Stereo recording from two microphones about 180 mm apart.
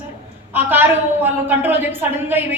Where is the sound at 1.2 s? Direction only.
10° right (ahead or behind).